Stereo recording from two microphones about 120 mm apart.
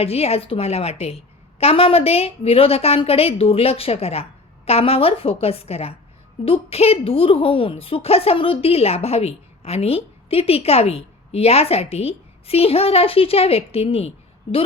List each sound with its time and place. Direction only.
0.0 s a woman's voice: 55° left (ahead or behind)